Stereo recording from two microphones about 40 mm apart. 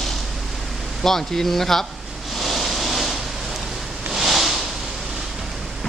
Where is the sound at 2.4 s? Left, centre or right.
Centre.